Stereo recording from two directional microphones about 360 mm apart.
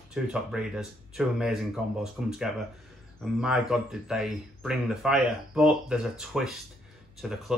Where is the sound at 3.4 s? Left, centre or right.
Centre.